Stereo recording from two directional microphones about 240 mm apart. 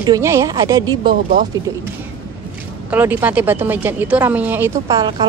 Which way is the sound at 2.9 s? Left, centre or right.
Centre.